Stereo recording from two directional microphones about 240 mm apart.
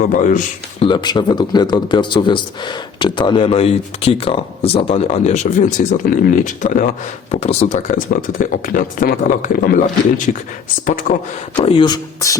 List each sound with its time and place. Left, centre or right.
0.0 s speech: left
0.9 s speech: centre; by 11.2 s left
11.5 s speech: left